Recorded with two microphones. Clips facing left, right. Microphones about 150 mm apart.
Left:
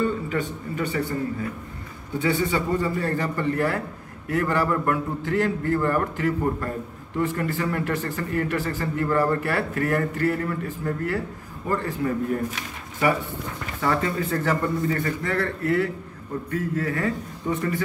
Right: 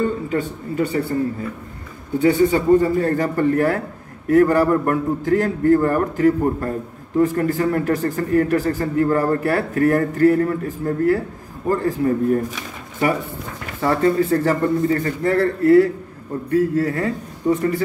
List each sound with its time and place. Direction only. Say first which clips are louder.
0.0 s speech: right 4 dB; 40° right (ahead or behind)
2.1 s a man's voice: right 8 dB; 45° right (ahead or behind)
13.7 s speech: right 7 dB; 35° right (ahead or behind)